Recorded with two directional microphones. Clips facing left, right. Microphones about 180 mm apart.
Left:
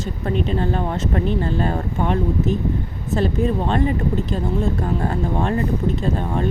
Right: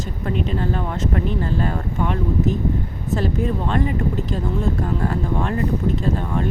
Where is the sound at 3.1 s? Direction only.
25° left (ahead or behind).